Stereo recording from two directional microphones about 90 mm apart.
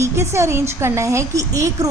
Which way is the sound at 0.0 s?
30° right (ahead or behind).